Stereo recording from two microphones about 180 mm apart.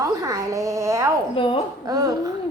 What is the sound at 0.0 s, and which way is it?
A woman's voice, 20° right (ahead or behind).